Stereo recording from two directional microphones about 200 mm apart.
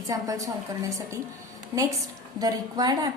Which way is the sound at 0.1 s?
15° right (ahead or behind).